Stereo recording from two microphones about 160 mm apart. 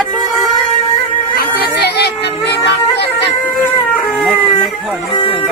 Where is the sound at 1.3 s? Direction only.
90° left.